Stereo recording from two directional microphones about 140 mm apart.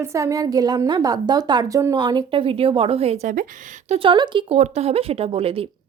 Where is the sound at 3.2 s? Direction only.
70° right (ahead or behind).